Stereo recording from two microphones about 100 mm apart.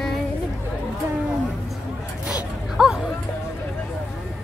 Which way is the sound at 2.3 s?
5° right (ahead or behind).